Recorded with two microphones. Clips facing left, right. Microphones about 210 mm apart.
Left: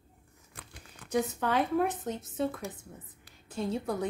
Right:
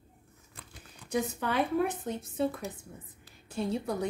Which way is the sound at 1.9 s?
10° right (ahead or behind).